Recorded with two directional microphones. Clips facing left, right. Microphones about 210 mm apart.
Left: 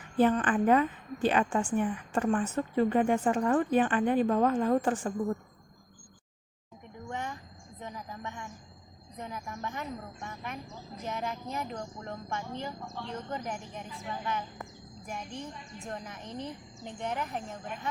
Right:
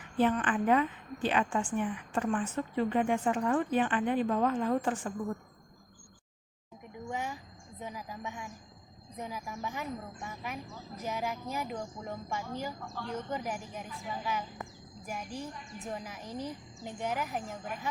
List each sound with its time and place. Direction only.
0.2 s a woman's voice: 40° left (ahead or behind)
7.1 s speech: 10° right (ahead or behind)
12.8 s speech: 25° left (ahead or behind)
13.1 s speech: 5° right (ahead or behind)